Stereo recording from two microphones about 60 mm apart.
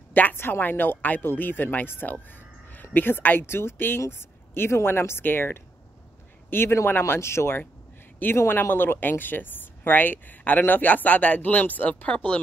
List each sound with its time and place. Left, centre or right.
0.1 s speech: left